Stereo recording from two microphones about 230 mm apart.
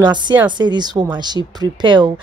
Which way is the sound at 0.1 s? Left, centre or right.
Centre.